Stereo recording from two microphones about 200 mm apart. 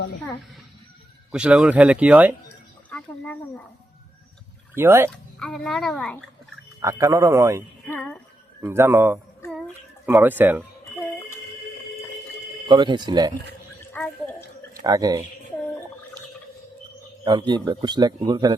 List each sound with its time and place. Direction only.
1.3 s speech: 5° right (ahead or behind)
4.7 s speech: 10° right (ahead or behind)
5.1 s speech: 5° left (ahead or behind)
6.7 s speech: 15° right (ahead or behind)
7.9 s a sound: 5° left (ahead or behind)
8.6 s speech: 10° right (ahead or behind)
12.6 s a man's voice: 20° right (ahead or behind)
14.0 s speech: 10° left (ahead or behind)
14.8 s speech: 20° right (ahead or behind)
17.2 s a man's voice: 20° right (ahead or behind)